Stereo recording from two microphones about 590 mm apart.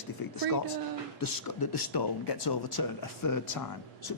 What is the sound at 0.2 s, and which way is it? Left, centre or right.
Speech, left.